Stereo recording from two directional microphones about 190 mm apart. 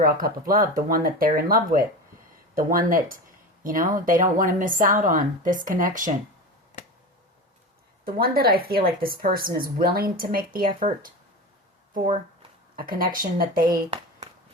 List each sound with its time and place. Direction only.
0.0 s a woman's voice: 50° right (ahead or behind)
8.0 s a woman's voice: 50° right (ahead or behind)